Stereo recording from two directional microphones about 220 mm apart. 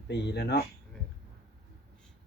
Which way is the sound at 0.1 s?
50° left (ahead or behind).